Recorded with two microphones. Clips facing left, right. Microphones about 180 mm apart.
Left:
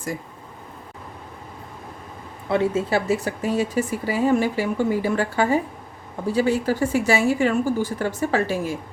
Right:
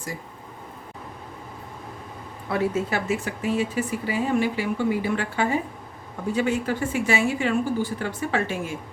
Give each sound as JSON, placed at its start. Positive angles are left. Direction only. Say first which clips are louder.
{"t": 2.5, "sound": "speech", "louder": "left 4 dB", "side_deg": 25}